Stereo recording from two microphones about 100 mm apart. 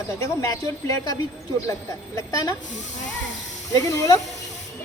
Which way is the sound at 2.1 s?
35° left (ahead or behind).